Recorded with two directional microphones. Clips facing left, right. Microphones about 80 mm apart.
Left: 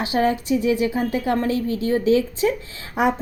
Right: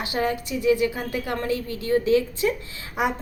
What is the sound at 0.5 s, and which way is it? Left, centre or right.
A woman's voice, left.